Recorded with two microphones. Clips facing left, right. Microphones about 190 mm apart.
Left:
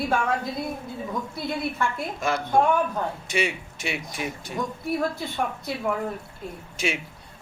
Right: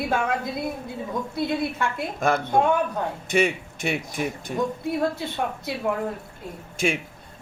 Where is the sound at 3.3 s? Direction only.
50° right (ahead or behind).